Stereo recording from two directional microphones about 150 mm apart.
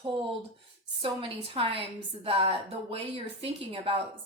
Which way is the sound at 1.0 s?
35° right (ahead or behind).